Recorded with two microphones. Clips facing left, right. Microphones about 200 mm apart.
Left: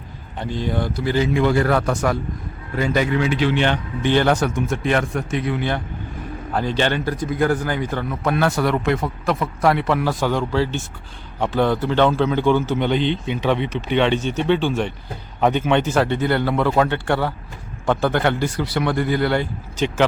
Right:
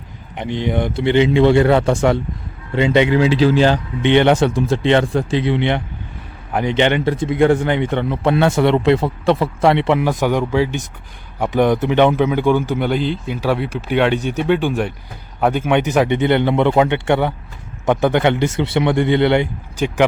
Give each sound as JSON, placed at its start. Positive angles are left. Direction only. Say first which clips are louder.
{"t": 0.3, "sound": "speech", "louder": "right 4 dB", "side_deg": -20}
{"t": 3.3, "sound": "speech", "louder": "right 6 dB", "side_deg": -35}
{"t": 4.0, "sound": "a man's voice", "louder": "right 5 dB", "side_deg": -20}